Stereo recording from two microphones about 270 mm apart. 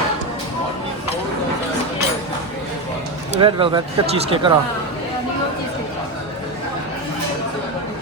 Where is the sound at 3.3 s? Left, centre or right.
Centre.